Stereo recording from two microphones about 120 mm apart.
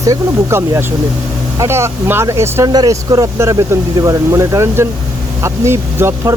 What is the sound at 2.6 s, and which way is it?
Speech, 35° right (ahead or behind).